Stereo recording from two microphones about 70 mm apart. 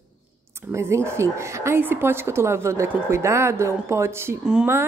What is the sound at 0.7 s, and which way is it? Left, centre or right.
A woman's voice, right.